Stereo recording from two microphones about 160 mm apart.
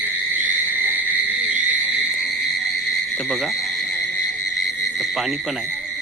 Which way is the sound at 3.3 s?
Centre (ahead or behind).